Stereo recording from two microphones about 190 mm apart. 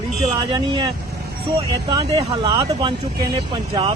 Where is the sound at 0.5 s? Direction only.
25° right (ahead or behind).